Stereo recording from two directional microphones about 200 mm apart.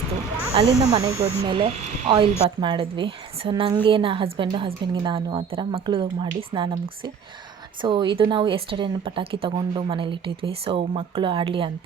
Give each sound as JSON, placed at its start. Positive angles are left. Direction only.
{"t": 0.5, "sound": "a woman's voice", "side_deg": -30}